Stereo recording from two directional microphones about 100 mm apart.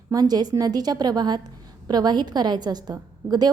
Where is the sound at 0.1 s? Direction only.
40° right (ahead or behind).